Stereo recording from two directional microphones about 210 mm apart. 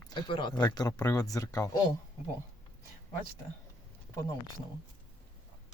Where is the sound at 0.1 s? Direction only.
20° left (ahead or behind).